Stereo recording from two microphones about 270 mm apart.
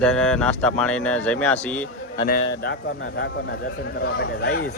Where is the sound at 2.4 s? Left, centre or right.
Left.